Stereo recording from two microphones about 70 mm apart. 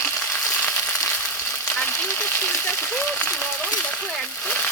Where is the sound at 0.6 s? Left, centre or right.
Centre.